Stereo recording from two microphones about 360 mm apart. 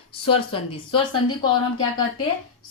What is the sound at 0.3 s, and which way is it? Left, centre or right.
Speech, centre.